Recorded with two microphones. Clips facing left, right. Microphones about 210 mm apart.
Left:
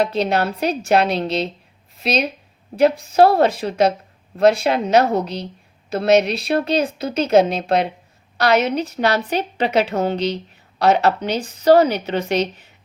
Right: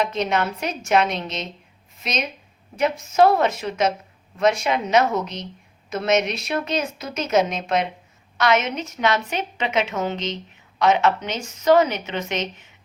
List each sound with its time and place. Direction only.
0.0 s a woman's voice: 35° left (ahead or behind)